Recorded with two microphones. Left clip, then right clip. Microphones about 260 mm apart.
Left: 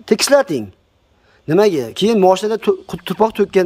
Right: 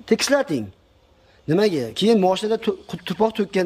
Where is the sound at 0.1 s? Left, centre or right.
Left.